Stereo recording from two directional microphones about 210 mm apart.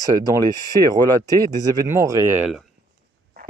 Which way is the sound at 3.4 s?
45° right (ahead or behind).